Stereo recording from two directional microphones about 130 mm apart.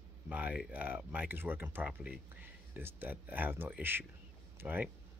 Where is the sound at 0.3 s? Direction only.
10° right (ahead or behind).